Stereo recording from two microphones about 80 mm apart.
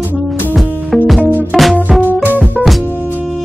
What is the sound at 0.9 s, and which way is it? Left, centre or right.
Music, centre.